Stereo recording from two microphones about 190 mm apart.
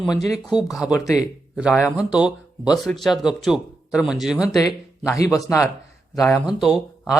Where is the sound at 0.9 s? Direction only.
15° left (ahead or behind).